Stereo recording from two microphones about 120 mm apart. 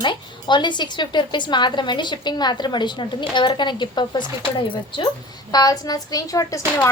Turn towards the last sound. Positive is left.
turn(degrees=25)  # may be behind; listen again after turning